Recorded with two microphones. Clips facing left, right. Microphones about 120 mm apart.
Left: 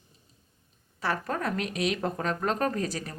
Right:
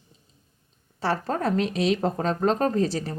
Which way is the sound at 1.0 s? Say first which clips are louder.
Right 4 dB; 30° right (ahead or behind).